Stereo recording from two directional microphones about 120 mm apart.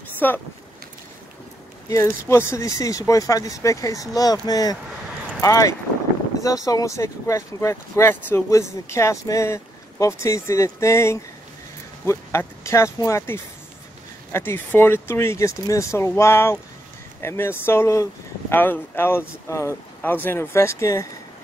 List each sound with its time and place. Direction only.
0.2 s speech: 15° left (ahead or behind)
1.9 s speech: 25° left (ahead or behind)